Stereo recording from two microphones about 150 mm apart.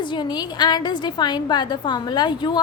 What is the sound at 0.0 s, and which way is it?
A woman's voice, 30° left (ahead or behind).